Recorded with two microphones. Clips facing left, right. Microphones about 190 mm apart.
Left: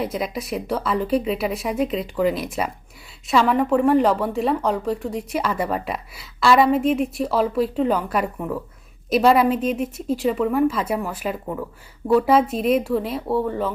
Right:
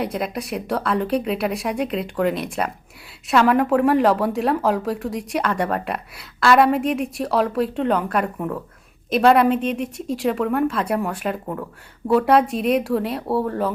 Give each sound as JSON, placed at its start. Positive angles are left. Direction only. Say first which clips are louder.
{"t": 0.0, "sound": "speech", "louder": "right 1 dB", "side_deg": 0}